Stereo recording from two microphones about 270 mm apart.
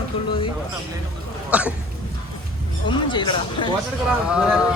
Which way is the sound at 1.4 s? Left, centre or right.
Centre.